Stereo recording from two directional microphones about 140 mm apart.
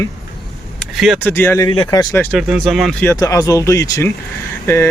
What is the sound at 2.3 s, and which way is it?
Speech, centre (ahead or behind).